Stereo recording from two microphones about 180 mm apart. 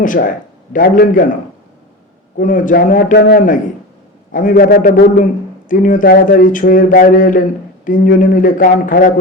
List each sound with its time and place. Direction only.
0.0 s a man's voice: 50° left (ahead or behind)
2.4 s a man's voice: 45° left (ahead or behind)